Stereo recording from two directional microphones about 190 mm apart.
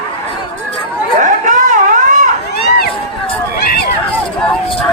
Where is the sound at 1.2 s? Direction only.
40° right (ahead or behind).